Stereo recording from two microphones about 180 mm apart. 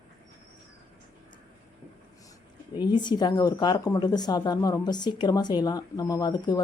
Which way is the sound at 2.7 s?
25° left (ahead or behind).